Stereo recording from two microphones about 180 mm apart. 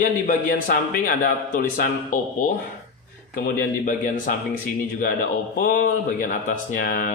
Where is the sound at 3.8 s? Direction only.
45° left (ahead or behind).